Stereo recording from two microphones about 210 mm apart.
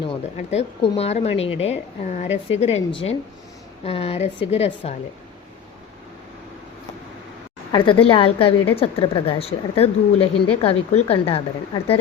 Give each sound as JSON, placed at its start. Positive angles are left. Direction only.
{"t": 0.3, "sound": "a woman's voice", "side_deg": 30}
{"t": 7.7, "sound": "speech", "side_deg": 25}